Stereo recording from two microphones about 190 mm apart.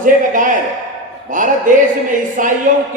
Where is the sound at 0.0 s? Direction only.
45° right (ahead or behind).